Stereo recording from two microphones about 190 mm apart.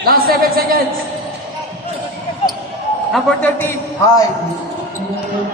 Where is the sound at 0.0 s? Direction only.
50° right (ahead or behind).